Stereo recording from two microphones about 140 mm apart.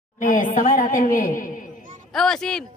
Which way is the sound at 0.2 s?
70° left (ahead or behind).